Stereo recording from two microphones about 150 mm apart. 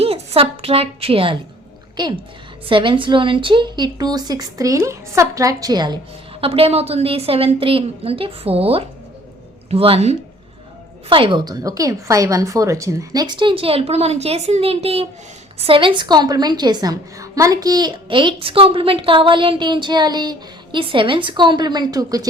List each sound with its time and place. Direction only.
0.0 s a woman's voice: 40° right (ahead or behind)
6.4 s a woman's voice: 40° right (ahead or behind); by 22.3 s 25° right (ahead or behind)